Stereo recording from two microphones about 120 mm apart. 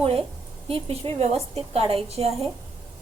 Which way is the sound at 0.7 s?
55° right (ahead or behind).